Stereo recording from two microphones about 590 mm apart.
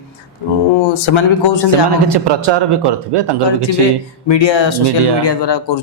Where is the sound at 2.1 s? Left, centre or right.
Right.